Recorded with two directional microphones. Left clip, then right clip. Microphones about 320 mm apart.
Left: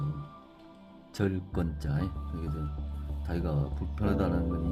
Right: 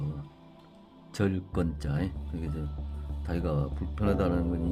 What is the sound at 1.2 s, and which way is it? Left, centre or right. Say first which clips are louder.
A man's voice: right 2 dB; centre.